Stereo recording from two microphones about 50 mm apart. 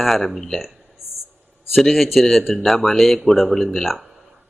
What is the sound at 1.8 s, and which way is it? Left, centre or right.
Speech, centre.